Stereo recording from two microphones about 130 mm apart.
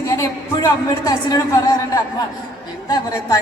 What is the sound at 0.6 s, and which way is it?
Speech, 30° left (ahead or behind).